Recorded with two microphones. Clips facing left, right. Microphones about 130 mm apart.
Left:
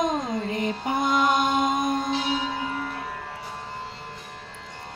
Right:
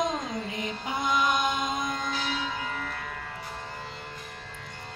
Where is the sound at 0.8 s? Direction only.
55° left (ahead or behind).